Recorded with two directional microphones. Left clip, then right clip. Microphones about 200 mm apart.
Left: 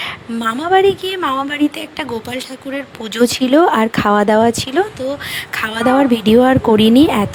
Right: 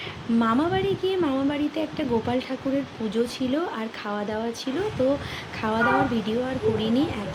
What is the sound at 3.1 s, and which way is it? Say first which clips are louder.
Speech: left 14 dB; 55° left (ahead or behind).